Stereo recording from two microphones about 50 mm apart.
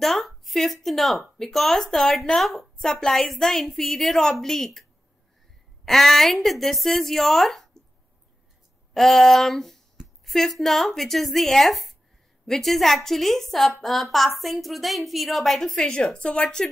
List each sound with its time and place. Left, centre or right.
0.0 s a sound: centre
0.8 s a woman's voice: centre
5.9 s speech: centre
8.9 s a woman's voice: centre